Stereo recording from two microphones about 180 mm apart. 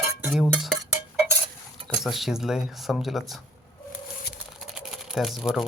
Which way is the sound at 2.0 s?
Centre (ahead or behind).